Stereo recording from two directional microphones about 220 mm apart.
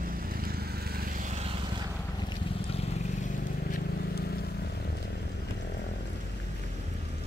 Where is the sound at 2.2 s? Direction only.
25° left (ahead or behind); by 4.5 s 45° left (ahead or behind).